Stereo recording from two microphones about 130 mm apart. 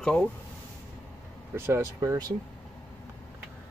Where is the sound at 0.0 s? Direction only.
5° left (ahead or behind).